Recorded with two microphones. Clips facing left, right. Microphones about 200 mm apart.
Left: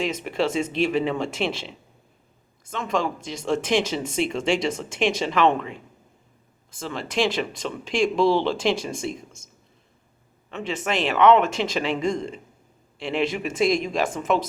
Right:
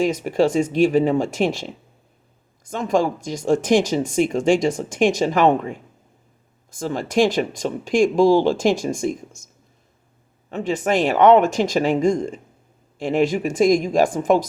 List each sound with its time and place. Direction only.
0.0 s speech: 40° right (ahead or behind)
10.5 s speech: 45° right (ahead or behind)